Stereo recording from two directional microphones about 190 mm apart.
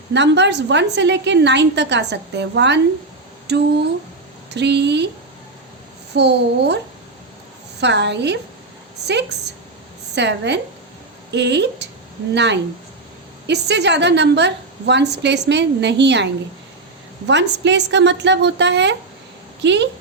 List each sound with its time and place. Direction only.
0.1 s a woman's voice: 65° right (ahead or behind)
6.1 s a woman's voice: 60° right (ahead or behind)
7.8 s a woman's voice: 65° right (ahead or behind)
10.2 s a woman's voice: 65° right (ahead or behind)